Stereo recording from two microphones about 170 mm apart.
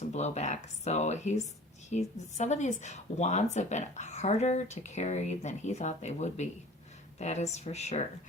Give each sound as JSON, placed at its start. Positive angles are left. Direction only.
{"t": 0.1, "sound": "speech", "side_deg": 40}